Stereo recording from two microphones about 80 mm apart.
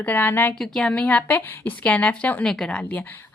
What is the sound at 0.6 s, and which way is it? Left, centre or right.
Speech, centre.